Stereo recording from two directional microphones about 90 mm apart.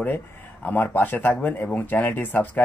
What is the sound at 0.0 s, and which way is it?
Speech, 20° left (ahead or behind).